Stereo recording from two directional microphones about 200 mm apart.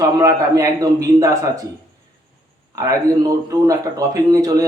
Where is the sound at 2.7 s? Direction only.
15° right (ahead or behind).